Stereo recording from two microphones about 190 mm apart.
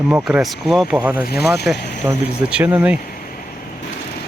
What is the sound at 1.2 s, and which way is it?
Speech, 55° left (ahead or behind).